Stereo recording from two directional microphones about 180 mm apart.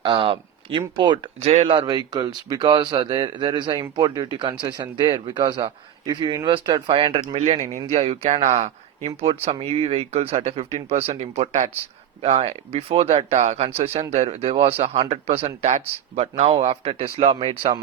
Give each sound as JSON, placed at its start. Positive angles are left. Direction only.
{"t": 0.0, "sound": "speech", "side_deg": -30}